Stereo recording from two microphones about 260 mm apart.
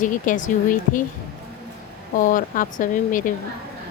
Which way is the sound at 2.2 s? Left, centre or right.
Left.